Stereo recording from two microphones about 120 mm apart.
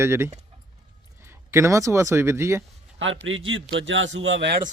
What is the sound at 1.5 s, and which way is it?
Speech, 25° right (ahead or behind).